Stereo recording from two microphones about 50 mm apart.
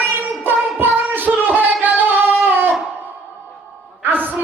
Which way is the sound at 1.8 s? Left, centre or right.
Right.